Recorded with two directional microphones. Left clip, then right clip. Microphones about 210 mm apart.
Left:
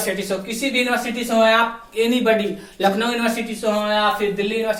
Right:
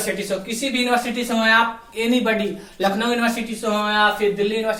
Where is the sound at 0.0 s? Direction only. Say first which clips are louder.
Left 1 dB; 15° left (ahead or behind).